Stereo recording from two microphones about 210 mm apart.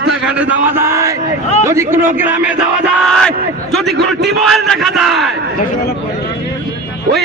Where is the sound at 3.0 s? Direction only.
Centre (ahead or behind).